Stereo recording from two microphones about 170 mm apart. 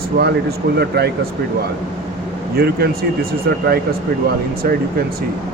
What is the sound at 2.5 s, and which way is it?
Speech, 65° right (ahead or behind).